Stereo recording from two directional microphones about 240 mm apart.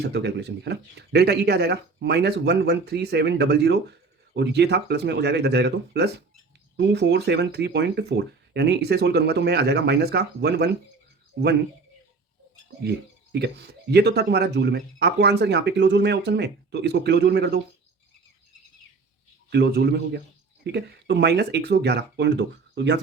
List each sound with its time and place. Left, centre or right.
0.0 s speech: right
13.3 s speech: right
19.5 s speech: right